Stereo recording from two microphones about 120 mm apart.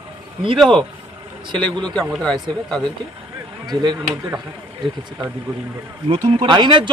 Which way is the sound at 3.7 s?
35° right (ahead or behind).